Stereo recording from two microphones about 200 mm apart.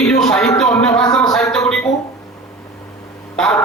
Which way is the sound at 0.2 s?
5° left (ahead or behind).